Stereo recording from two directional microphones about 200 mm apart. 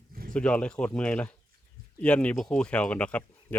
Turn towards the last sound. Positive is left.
turn(degrees=5)  # may be behind; listen again after turning